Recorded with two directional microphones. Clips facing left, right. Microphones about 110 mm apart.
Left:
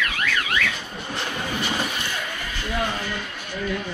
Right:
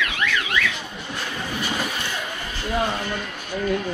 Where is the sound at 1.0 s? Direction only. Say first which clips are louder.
Left 2 dB; 25° left (ahead or behind).